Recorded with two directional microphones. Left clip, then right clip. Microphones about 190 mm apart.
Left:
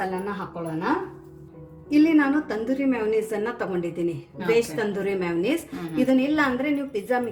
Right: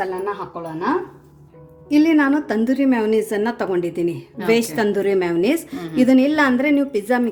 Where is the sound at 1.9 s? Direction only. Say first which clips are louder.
Right 4 dB; 60° right (ahead or behind).